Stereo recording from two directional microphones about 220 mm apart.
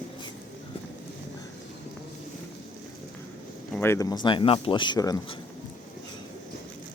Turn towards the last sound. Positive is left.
turn(degrees=20)  # may be behind; listen again after turning